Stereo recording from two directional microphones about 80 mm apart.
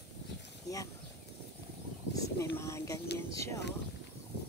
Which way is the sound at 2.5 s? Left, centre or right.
Left.